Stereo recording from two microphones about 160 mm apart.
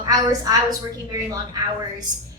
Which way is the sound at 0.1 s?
25° right (ahead or behind).